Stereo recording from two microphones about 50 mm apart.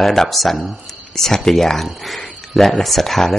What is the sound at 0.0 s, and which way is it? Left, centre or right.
Speech, centre.